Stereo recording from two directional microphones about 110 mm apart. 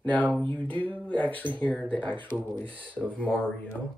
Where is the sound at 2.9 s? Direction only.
10° left (ahead or behind).